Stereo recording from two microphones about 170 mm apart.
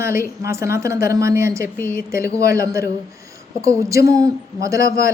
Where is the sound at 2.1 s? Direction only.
15° right (ahead or behind).